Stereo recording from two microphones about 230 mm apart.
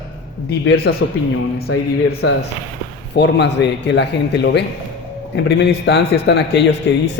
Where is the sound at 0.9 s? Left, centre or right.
Left.